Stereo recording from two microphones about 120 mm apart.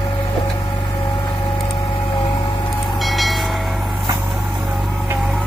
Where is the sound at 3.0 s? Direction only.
Centre (ahead or behind).